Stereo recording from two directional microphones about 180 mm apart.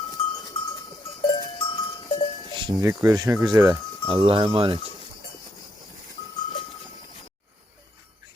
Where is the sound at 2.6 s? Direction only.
20° right (ahead or behind).